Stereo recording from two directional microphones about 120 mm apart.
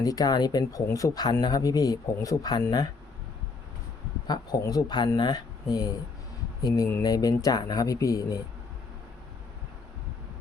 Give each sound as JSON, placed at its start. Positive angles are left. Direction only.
{"t": 0.0, "sound": "speech", "side_deg": 30}
{"t": 4.3, "sound": "speech", "side_deg": 35}